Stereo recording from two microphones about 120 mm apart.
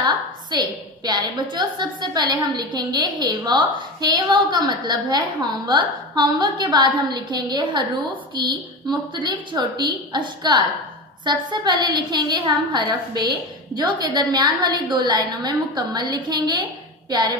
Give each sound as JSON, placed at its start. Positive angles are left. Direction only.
{"t": 0.0, "sound": "a woman's voice", "side_deg": -35}